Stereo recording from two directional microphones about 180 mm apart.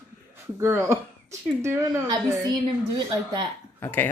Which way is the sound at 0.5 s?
15° right (ahead or behind).